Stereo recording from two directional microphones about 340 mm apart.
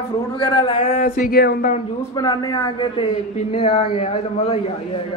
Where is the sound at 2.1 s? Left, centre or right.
Centre.